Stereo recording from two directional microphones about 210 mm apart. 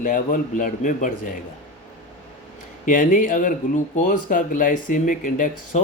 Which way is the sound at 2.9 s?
40° left (ahead or behind).